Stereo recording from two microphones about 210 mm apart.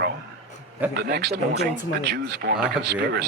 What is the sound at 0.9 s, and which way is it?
Speech, 50° right (ahead or behind).